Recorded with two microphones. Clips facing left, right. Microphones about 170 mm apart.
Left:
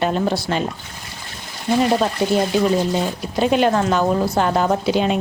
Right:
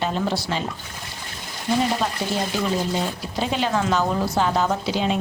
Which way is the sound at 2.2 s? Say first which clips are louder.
Left 8 dB; 60° left (ahead or behind).